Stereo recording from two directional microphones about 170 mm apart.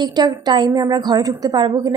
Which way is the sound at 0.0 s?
25° right (ahead or behind).